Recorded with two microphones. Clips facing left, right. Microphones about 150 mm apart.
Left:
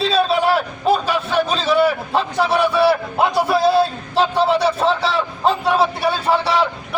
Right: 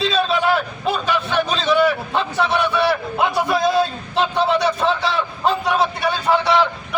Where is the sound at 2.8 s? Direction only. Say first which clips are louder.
Left 3 dB; 35° left (ahead or behind).